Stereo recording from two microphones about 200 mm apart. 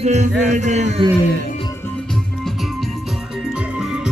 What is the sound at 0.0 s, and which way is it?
Music, 35° right (ahead or behind).